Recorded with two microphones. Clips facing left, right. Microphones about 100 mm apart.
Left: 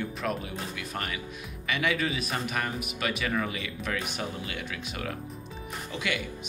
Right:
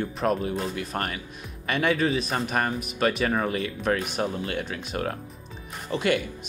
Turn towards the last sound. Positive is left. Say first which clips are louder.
# right 7 dB
turn(degrees=-45)  # may be behind; listen again after turning